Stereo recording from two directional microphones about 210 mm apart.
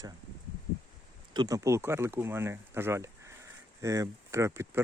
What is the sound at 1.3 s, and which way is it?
Speech, 15° right (ahead or behind).